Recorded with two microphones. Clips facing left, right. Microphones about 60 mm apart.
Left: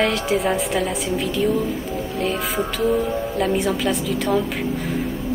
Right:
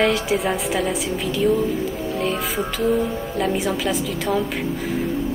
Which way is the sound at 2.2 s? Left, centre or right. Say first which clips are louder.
Left 1 dB; centre.